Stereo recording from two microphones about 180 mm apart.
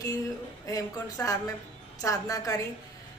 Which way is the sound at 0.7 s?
20° left (ahead or behind).